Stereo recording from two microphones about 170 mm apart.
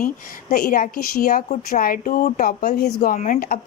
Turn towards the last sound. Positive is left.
turn(degrees=50)  # may be behind; listen again after turning